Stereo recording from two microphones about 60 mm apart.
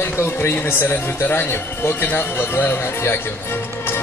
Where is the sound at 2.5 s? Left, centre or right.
Left.